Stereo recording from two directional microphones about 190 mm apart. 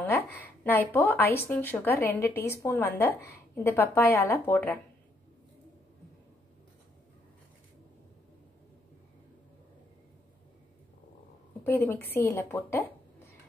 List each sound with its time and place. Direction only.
0.0 s a woman's voice: 10° left (ahead or behind)
11.6 s a woman's voice: 10° left (ahead or behind)